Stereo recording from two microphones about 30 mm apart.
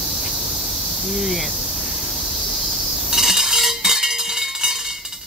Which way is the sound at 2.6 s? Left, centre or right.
Centre.